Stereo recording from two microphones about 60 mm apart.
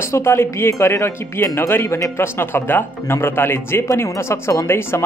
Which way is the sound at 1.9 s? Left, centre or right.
Left.